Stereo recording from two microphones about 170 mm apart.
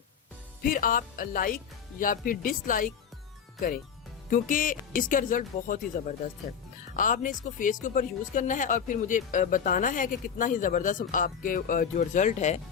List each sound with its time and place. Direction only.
0.6 s speech: 55° left (ahead or behind)
4.3 s speech: 55° left (ahead or behind)